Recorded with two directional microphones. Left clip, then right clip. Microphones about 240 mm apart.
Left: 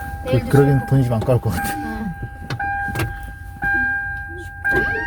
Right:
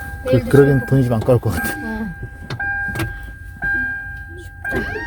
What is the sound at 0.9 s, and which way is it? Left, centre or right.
Speech, right.